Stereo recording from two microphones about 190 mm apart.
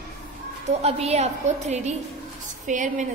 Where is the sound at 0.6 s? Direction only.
35° right (ahead or behind).